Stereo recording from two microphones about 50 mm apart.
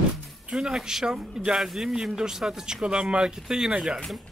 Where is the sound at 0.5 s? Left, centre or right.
Centre.